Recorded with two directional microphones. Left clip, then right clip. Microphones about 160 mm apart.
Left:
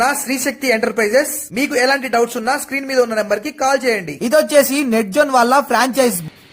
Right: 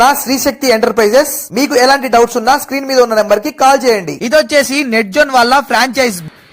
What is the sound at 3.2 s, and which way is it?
Speech, 10° right (ahead or behind).